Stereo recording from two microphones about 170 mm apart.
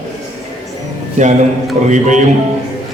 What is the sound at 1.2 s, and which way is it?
A man's voice, 45° right (ahead or behind).